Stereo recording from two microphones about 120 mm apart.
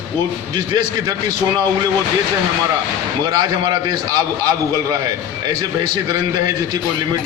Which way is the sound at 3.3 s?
35° right (ahead or behind).